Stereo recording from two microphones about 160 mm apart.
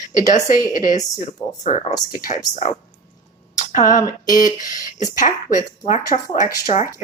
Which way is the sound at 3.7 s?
55° left (ahead or behind).